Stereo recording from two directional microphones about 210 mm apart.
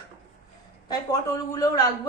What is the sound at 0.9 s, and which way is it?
Speech, 20° left (ahead or behind).